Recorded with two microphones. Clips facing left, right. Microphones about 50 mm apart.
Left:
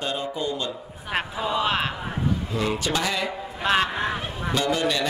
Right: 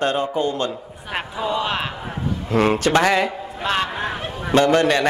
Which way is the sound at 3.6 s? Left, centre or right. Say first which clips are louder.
Even; centre.